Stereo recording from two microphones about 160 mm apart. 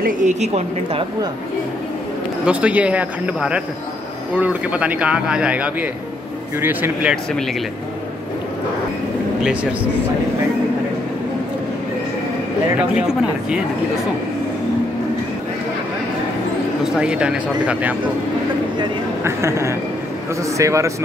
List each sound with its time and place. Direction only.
0.0 s a woman's voice: 50° right (ahead or behind)
2.4 s speech: 10° right (ahead or behind)
9.4 s speech: 5° right (ahead or behind)
12.9 s speech: 5° right (ahead or behind)
16.9 s speech: 5° right (ahead or behind)
19.2 s a man's voice: 15° right (ahead or behind)